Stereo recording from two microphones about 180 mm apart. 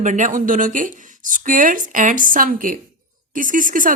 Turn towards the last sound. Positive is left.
turn(degrees=-50)  # may be behind; listen again after turning